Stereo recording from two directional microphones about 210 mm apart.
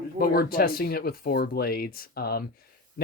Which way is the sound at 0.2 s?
45° left (ahead or behind).